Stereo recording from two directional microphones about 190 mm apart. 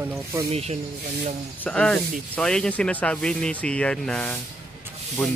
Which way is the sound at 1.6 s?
5° left (ahead or behind).